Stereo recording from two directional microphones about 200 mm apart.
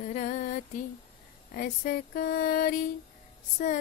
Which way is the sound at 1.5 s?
45° left (ahead or behind).